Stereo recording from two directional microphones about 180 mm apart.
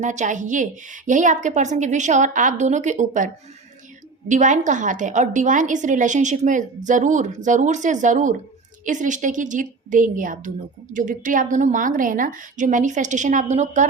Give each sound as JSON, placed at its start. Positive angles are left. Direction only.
{"t": 0.0, "sound": "a woman's voice", "side_deg": -40}